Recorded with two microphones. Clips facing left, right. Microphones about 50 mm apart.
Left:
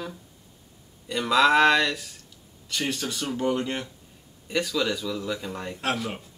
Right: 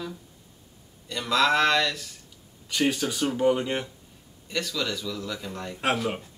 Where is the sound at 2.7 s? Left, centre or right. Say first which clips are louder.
Right 4 dB; centre.